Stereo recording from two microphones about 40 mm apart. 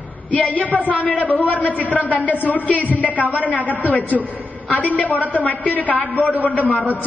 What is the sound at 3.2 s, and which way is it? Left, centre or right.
Speech, right.